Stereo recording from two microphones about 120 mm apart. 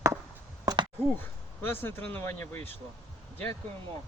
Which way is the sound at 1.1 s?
15° left (ahead or behind).